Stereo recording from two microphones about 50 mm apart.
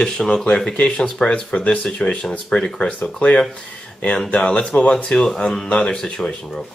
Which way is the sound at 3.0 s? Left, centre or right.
Left.